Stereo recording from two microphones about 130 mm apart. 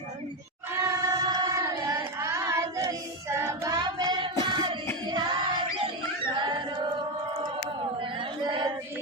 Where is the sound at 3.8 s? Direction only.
35° right (ahead or behind).